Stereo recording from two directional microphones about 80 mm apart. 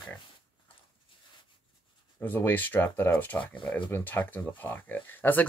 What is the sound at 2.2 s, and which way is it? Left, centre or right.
Speech, left.